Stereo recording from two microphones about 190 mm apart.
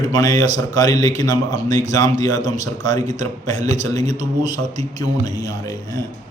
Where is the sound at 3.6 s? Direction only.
40° right (ahead or behind).